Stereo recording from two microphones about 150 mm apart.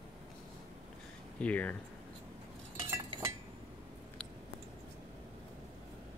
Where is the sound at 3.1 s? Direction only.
35° right (ahead or behind).